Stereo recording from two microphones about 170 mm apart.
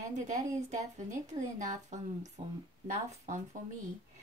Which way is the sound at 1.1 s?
45° right (ahead or behind).